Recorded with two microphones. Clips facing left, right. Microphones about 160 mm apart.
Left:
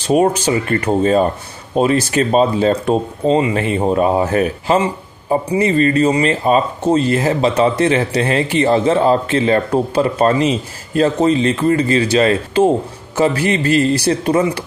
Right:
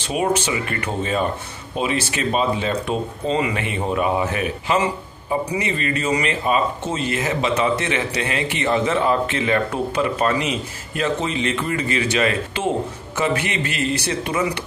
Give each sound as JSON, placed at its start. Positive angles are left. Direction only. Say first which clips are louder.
{"t": 0.0, "sound": "speech", "louder": "left 7 dB", "side_deg": 40}